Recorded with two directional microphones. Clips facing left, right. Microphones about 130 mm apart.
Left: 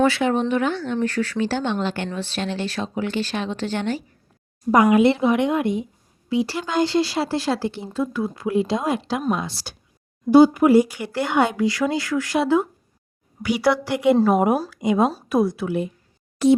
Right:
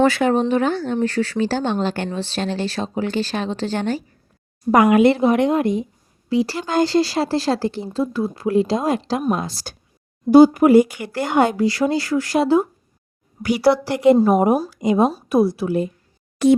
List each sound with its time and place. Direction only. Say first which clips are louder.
0.0 s speech: right 3 dB; 45° right (ahead or behind)
4.7 s speech: right 2 dB; 65° right (ahead or behind)
5.1 s speech: right 3 dB; 40° right (ahead or behind)
14.8 s a woman's voice: right 1 dB; 10° left (ahead or behind)
15.3 s speech: right 3 dB; 35° right (ahead or behind)